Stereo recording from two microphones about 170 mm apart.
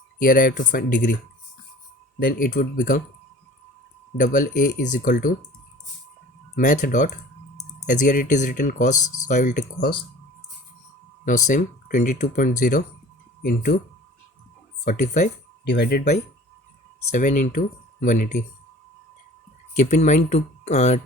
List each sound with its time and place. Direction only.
0.2 s speech: 55° left (ahead or behind)
2.1 s speech: 60° left (ahead or behind)
4.2 s speech: 50° left (ahead or behind)
6.6 s speech: 50° left (ahead or behind)
11.3 s speech: 50° left (ahead or behind)
14.8 s speech: 45° left (ahead or behind)
15.6 s speech: 80° left
17.1 s speech: 50° left (ahead or behind)
19.7 s speech: 45° left (ahead or behind)